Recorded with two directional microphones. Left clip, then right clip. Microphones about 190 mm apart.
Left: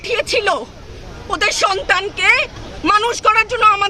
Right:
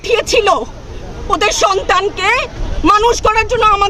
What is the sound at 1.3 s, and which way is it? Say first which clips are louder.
Speech: right 4 dB; 10° right (ahead or behind).